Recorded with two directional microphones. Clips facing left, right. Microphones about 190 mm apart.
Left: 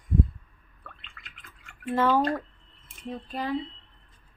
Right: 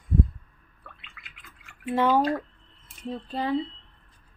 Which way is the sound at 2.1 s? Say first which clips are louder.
Right 2 dB; 5° right (ahead or behind).